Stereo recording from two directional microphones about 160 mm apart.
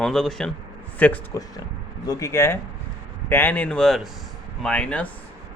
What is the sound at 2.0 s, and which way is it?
Speech, 20° left (ahead or behind).